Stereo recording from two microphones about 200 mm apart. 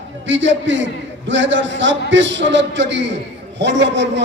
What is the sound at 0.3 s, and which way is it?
A man's voice, 70° right (ahead or behind).